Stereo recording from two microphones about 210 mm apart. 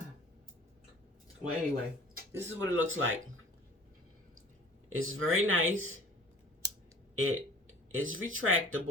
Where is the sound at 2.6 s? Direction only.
65° right (ahead or behind).